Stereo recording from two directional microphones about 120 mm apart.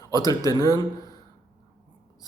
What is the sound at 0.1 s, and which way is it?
Speech, 30° left (ahead or behind).